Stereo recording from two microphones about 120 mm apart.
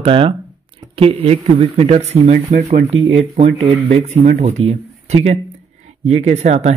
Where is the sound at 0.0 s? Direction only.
50° right (ahead or behind); by 2.6 s 65° right (ahead or behind).